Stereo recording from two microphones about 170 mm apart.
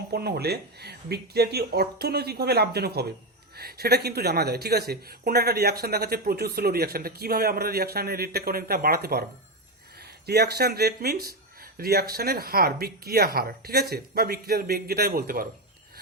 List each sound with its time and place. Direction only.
0.1 s speech: 70° right (ahead or behind)
10.2 s speech: 70° right (ahead or behind)